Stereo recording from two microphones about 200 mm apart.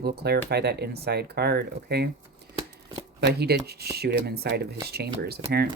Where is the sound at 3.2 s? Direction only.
55° right (ahead or behind).